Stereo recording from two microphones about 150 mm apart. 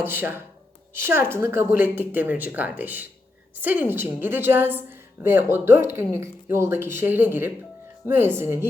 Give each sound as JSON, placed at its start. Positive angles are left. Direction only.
{"t": 0.0, "sound": "a woman's voice", "side_deg": -15}